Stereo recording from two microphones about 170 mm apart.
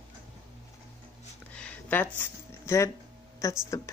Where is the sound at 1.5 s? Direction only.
10° left (ahead or behind).